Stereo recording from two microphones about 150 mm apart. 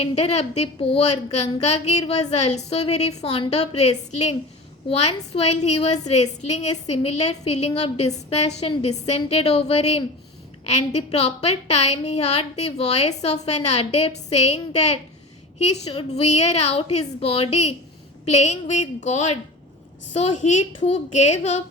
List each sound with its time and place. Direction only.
0.0 s a woman's voice: 45° left (ahead or behind)